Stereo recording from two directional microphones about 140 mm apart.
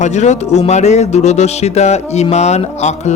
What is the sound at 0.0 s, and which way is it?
A man's voice, 55° left (ahead or behind).